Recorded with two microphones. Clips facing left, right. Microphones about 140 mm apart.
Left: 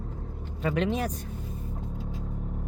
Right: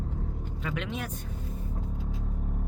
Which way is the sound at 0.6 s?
40° left (ahead or behind).